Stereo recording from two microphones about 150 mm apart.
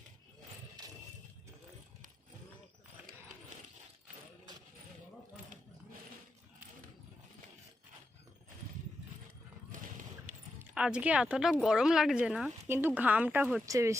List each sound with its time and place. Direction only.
10.6 s a woman's voice: 5° right (ahead or behind)
12.6 s speech: 15° right (ahead or behind)
13.7 s speech: 20° right (ahead or behind)